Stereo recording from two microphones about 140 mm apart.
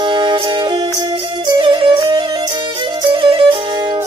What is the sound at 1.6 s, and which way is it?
Music, 35° right (ahead or behind).